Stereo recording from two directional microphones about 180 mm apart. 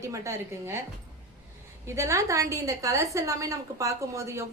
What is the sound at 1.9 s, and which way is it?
A woman's voice, 15° right (ahead or behind).